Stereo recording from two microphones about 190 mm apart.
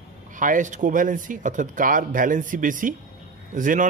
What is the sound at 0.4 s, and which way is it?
Speech, 45° right (ahead or behind).